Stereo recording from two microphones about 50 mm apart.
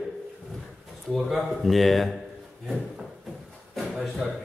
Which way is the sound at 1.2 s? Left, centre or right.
Centre.